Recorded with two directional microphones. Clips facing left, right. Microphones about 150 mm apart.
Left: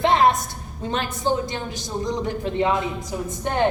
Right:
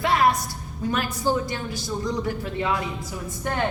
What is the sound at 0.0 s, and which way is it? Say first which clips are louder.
A woman's voice: left 3 dB; 25° left (ahead or behind).